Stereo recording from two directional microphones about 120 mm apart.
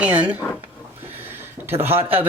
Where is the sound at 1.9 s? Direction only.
55° right (ahead or behind).